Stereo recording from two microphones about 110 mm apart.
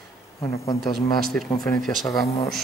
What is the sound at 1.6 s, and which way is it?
Speech, 5° left (ahead or behind).